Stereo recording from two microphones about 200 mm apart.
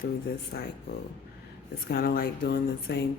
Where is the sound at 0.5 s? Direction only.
50° left (ahead or behind).